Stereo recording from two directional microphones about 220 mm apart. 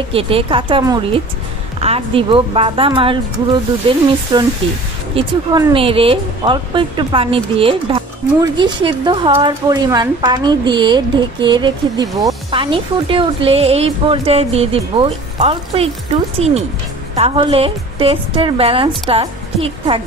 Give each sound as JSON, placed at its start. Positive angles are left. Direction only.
{"t": 0.1, "sound": "speech", "side_deg": -25}